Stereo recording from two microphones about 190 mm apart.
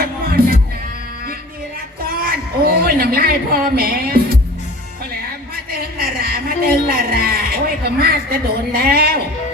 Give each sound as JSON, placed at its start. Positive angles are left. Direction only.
{"t": 0.0, "sound": "music", "side_deg": -50}
{"t": 2.0, "sound": "a sound", "side_deg": -50}
{"t": 6.1, "sound": "a man's voice", "side_deg": -50}